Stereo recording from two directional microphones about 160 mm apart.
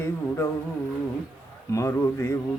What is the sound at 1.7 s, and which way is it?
Speech, 20° left (ahead or behind).